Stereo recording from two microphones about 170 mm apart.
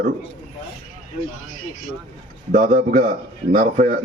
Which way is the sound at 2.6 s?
45° right (ahead or behind).